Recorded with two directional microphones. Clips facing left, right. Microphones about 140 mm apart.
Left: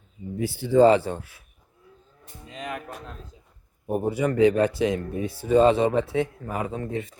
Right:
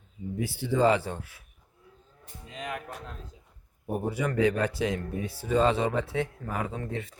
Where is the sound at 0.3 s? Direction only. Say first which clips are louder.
Left 8 dB; 30° left (ahead or behind).